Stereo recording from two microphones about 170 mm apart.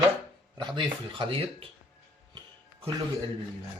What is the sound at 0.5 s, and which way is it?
Speech, 30° right (ahead or behind).